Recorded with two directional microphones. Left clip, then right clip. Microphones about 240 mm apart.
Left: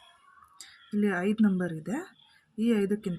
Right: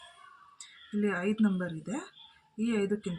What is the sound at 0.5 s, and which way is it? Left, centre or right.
Speech, left.